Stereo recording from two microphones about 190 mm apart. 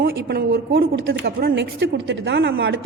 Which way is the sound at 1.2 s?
65° right (ahead or behind).